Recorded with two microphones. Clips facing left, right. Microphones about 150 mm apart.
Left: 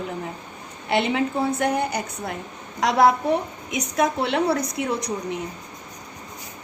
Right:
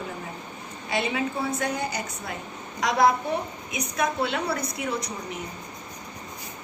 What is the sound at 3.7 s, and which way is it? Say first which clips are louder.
A woman's voice: left 5 dB; 85° left.